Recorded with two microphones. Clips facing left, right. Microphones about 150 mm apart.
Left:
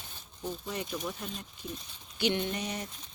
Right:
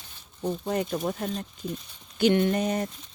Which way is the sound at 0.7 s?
50° right (ahead or behind).